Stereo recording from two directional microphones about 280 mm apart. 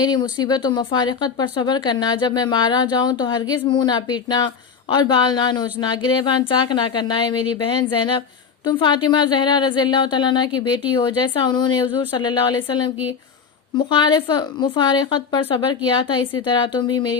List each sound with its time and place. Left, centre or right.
0.0 s speech: centre
8.6 s speech: centre